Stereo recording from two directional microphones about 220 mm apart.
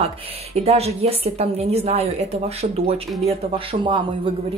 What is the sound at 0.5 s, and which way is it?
A woman's voice, 30° right (ahead or behind).